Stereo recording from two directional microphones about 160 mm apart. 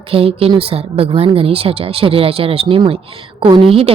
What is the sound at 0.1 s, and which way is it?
A woman's voice, 35° right (ahead or behind).